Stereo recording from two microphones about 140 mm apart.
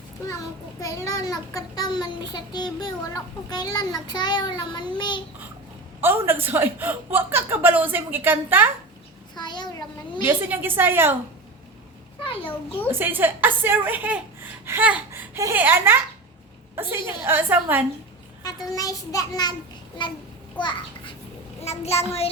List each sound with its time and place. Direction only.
0.8 s a child's voice: 25° left (ahead or behind)
4.0 s child singing: 30° left (ahead or behind)
6.0 s a woman's voice: 15° right (ahead or behind)
9.3 s a sound: 30° left (ahead or behind)
10.2 s a woman's voice: 15° right (ahead or behind)
12.9 s a woman's voice: 15° right (ahead or behind)
18.4 s a child's voice: 25° left (ahead or behind)
20.0 s child singing: 35° left (ahead or behind)
20.6 s a child's voice: 35° left (ahead or behind)
21.6 s a child's voice: 50° left (ahead or behind)